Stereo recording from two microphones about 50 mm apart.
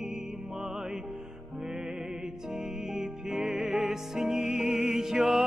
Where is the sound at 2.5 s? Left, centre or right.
Centre.